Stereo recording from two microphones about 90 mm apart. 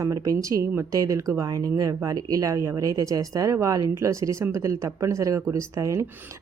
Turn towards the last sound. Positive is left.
turn(degrees=-35)  # may be behind; listen again after turning